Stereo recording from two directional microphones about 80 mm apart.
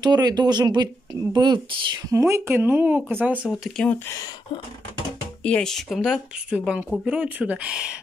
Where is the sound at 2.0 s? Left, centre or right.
Right.